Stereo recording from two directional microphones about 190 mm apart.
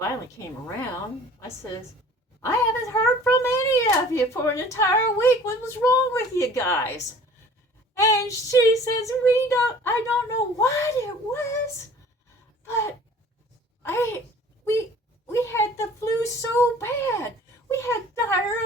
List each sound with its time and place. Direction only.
2.4 s a child's voice: 15° left (ahead or behind)
13.8 s a child's voice: 15° left (ahead or behind)
14.6 s a sound: 15° left (ahead or behind)
15.3 s a child's voice: 15° left (ahead or behind)